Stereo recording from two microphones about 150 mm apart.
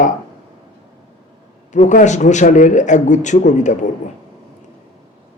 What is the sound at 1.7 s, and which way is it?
Speech, 55° left (ahead or behind).